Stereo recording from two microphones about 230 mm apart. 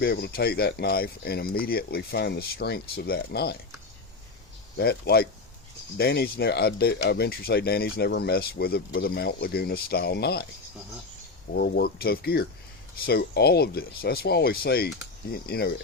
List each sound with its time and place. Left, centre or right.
0.0 s speech: left
4.8 s speech: left
11.5 s speech: left